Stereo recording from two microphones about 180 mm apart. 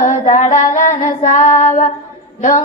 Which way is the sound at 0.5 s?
45° left (ahead or behind).